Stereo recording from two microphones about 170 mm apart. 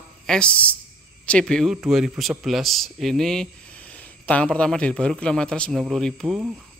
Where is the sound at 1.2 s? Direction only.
5° left (ahead or behind).